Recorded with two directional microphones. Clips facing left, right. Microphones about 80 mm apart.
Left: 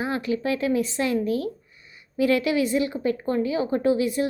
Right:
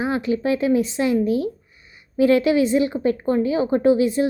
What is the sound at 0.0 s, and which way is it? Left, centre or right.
A woman's voice, right.